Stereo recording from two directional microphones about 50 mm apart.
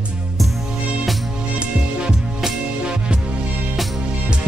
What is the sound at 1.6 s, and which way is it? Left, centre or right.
Music, centre.